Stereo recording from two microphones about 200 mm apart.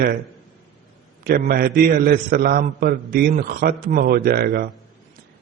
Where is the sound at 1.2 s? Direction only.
50° right (ahead or behind).